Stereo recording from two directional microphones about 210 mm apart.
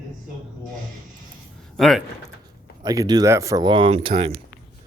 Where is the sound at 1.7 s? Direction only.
Centre (ahead or behind).